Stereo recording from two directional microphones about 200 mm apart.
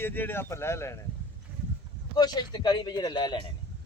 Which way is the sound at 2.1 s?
20° left (ahead or behind).